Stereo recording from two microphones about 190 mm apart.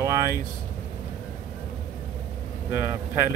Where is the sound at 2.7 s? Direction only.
10° right (ahead or behind).